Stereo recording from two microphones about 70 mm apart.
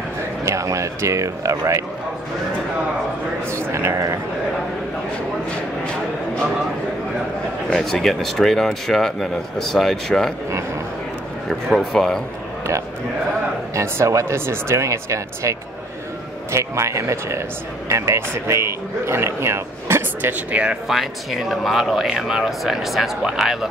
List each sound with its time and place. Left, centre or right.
0.5 s speech: right
3.5 s speech: right
7.7 s speech: centre
11.4 s speech: centre
13.7 s speech: right
16.5 s speech: right
20.9 s speech: centre